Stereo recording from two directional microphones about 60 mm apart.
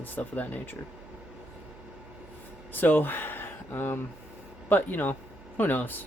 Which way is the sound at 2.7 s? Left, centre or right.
Left.